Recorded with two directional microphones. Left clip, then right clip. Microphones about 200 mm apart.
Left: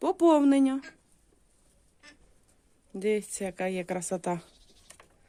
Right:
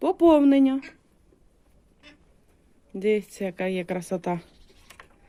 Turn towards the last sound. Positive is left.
turn(degrees=10)  # may be behind; listen again after turning